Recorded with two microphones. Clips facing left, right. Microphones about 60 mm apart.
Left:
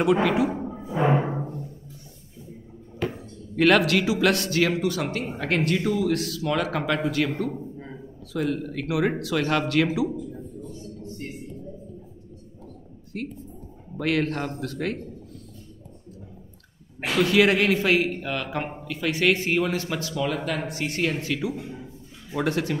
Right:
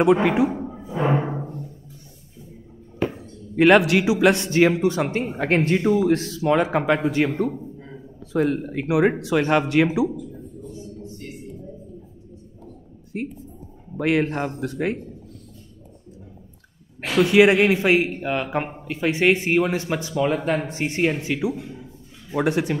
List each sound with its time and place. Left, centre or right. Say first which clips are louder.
0.0 s a man's voice: right 4 dB; right
0.5 s music: right 1 dB; centre
1.1 s timpani: right 1 dB; centre
3.5 s a man's voice: right 4 dB; centre
7.5 s a sound: even; centre
8.3 s a man's voice: right 5 dB; right
10.7 s a sound: right 1 dB; right
13.1 s a man's voice: right 3 dB; centre
17.1 s a man's voice: right 4 dB; right